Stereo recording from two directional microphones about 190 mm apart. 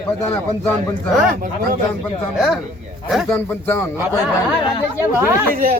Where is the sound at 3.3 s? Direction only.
10° left (ahead or behind).